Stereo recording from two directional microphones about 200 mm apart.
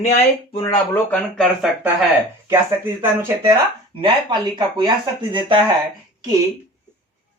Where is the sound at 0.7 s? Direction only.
10° left (ahead or behind).